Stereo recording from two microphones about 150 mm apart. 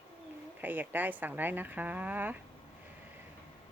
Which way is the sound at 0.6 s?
10° right (ahead or behind).